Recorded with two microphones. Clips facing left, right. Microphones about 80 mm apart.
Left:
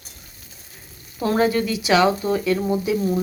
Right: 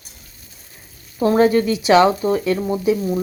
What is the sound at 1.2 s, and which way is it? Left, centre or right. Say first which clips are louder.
Speech: right 5 dB; right.